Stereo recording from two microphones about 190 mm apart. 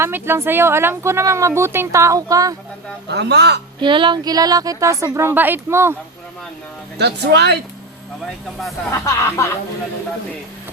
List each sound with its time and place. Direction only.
0.0 s speech: 15° right (ahead or behind)
3.1 s speech: 60° right (ahead or behind)
3.8 s speech: 25° right (ahead or behind)
7.0 s speech: 60° right (ahead or behind)
8.9 s music: 15° left (ahead or behind)